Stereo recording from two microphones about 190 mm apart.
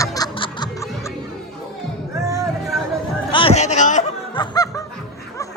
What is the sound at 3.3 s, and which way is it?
Music, 30° left (ahead or behind).